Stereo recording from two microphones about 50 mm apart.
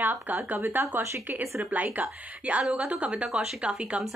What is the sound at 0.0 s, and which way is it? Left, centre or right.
A woman's voice, right.